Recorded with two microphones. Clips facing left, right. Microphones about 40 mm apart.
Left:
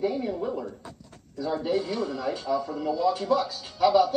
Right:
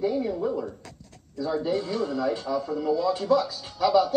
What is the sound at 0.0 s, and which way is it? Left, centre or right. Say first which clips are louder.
Speech: right 2 dB; centre.